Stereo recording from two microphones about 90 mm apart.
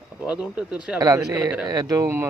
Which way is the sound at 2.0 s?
30° right (ahead or behind).